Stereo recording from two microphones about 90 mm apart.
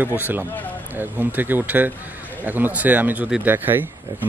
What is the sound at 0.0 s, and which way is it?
Speech, 20° right (ahead or behind).